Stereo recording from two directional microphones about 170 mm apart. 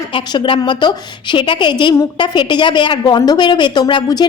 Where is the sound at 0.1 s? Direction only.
30° left (ahead or behind).